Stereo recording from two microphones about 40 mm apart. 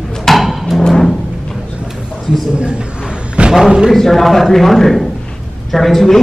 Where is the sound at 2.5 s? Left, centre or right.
Right.